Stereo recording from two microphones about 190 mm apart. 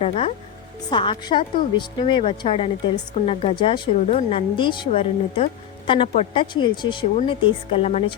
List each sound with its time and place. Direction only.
0.0 s a woman's voice: 30° left (ahead or behind)